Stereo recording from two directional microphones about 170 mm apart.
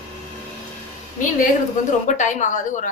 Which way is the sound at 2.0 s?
45° left (ahead or behind).